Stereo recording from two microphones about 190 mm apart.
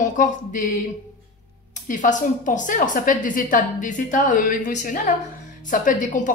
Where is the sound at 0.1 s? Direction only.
45° left (ahead or behind).